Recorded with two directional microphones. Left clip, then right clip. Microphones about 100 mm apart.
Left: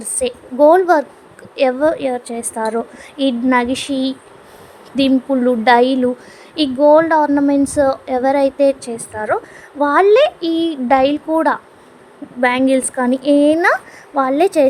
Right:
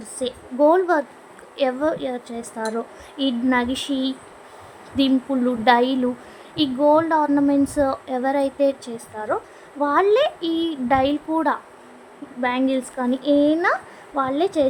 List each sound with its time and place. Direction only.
0.0 s a woman's voice: 90° left; by 4.1 s 65° left (ahead or behind)
5.3 s speech: 60° left (ahead or behind)
7.3 s speech: 45° left (ahead or behind)
12.4 s a woman's voice: 90° left